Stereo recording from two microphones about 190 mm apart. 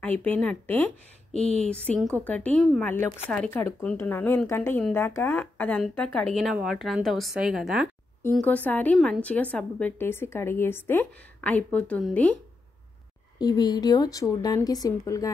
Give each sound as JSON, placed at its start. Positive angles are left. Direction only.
{"t": 0.0, "sound": "a woman's voice", "side_deg": 10}
{"t": 8.2, "sound": "a woman's voice", "side_deg": 10}
{"t": 13.4, "sound": "speech", "side_deg": 20}